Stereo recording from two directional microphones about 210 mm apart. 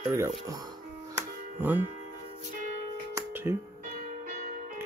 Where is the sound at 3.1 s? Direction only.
10° right (ahead or behind).